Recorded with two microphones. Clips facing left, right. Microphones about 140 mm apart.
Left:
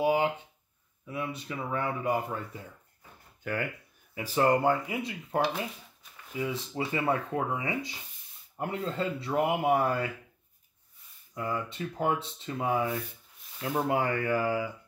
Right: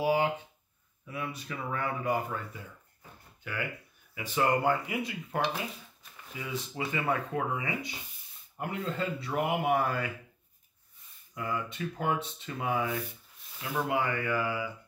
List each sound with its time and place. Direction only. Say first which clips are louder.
0.0 s speech: left 1 dB; 20° left (ahead or behind)
3.4 s speech: left 6 dB; 45° left (ahead or behind)
4.1 s speech: left 3 dB; 35° left (ahead or behind)
11.3 s speech: left 1 dB; 25° left (ahead or behind)
13.6 s speech: left 2 dB; 40° left (ahead or behind)